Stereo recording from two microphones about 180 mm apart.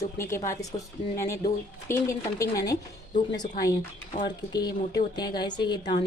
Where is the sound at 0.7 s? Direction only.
15° left (ahead or behind).